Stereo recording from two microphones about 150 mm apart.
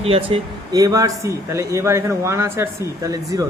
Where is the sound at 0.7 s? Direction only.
25° right (ahead or behind).